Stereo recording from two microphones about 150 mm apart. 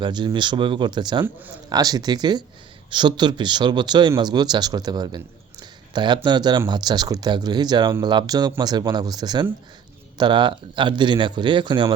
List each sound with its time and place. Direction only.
0.0 s a man's voice: 30° right (ahead or behind)